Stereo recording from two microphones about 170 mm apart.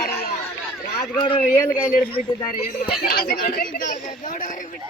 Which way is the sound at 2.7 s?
60° left (ahead or behind).